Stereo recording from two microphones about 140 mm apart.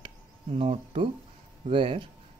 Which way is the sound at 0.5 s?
45° right (ahead or behind).